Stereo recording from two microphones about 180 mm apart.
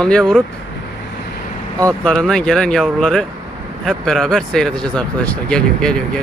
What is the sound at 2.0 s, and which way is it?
Speech, 5° left (ahead or behind).